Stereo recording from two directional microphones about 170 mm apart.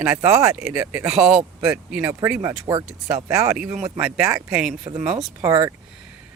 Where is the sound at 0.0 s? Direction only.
15° right (ahead or behind).